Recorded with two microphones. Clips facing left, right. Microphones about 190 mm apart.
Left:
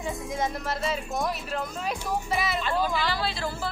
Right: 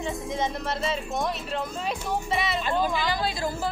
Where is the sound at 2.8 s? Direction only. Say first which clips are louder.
Right 1 dB; 15° right (ahead or behind).